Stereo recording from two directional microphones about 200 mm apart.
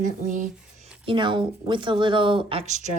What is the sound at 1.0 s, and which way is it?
Speech, 25° right (ahead or behind).